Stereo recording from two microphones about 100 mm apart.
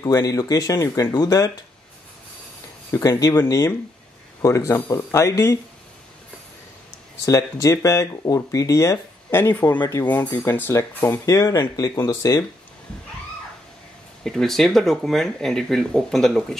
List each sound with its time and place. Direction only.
0.0 s speech: 40° left (ahead or behind)
2.9 s speech: 35° left (ahead or behind)
7.2 s speech: 35° left (ahead or behind)
11.2 s speech: 35° left (ahead or behind)
14.2 s speech: 5° left (ahead or behind)